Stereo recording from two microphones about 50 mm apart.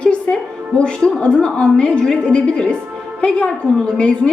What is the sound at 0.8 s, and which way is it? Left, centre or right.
A woman's voice, centre.